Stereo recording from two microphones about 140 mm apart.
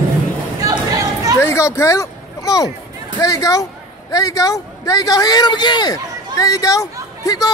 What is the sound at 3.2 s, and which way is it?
Speech, 25° left (ahead or behind).